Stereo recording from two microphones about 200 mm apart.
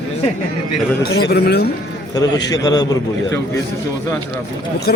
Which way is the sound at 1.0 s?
55° left (ahead or behind).